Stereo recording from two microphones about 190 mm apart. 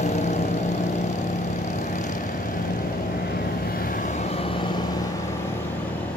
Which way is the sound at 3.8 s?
45° left (ahead or behind).